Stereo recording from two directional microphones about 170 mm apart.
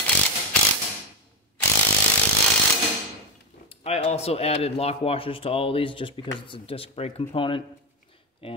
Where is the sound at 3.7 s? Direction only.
35° left (ahead or behind).